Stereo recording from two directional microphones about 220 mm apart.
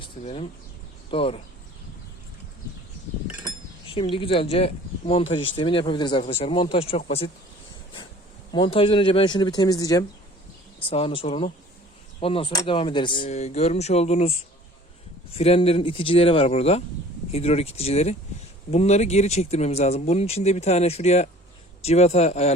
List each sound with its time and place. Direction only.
0.0 s speech: 25° left (ahead or behind)
3.8 s speech: 25° left (ahead or behind)
8.5 s speech: 25° left (ahead or behind)